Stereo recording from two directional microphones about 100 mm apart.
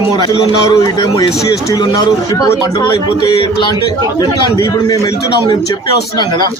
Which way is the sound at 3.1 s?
55° left (ahead or behind).